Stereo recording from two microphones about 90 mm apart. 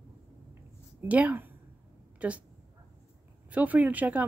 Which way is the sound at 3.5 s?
15° right (ahead or behind).